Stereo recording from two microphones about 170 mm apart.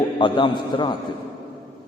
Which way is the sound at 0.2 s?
30° left (ahead or behind).